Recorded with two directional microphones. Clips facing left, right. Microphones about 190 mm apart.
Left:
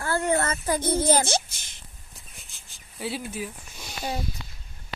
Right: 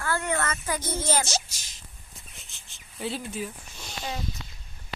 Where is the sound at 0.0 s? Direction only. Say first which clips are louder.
Left 4 dB; 35° left (ahead or behind).